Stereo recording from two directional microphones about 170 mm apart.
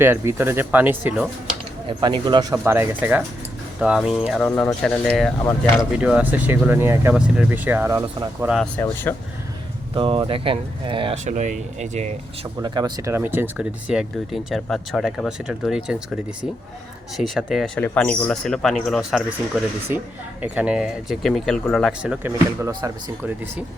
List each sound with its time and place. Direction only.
0.0 s speech: 15° right (ahead or behind)
1.9 s speech: 25° right (ahead or behind); by 4.2 s centre (ahead or behind)
4.4 s speech: 10° left (ahead or behind); by 8.5 s 15° right (ahead or behind)
8.8 s speech: 10° left (ahead or behind)
9.9 s speech: 30° right (ahead or behind)
11.3 s speech: 45° right (ahead or behind)
12.6 s speech: 25° right (ahead or behind)
22.7 s speech: 25° right (ahead or behind)
23.2 s speech: 10° right (ahead or behind)